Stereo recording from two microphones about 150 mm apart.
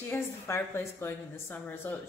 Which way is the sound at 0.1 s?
15° left (ahead or behind).